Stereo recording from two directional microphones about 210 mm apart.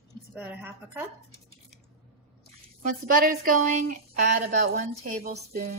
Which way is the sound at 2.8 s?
40° right (ahead or behind).